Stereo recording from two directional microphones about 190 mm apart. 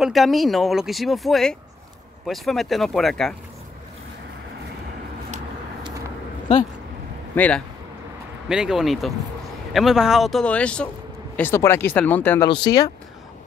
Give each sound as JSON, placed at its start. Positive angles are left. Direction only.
{"t": 0.0, "sound": "speech", "side_deg": 0}
{"t": 5.9, "sound": "a sound", "side_deg": -15}
{"t": 7.3, "sound": "speech", "side_deg": 5}
{"t": 12.4, "sound": "speech", "side_deg": 25}